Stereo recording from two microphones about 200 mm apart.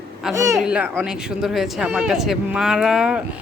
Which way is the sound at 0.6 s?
5° right (ahead or behind).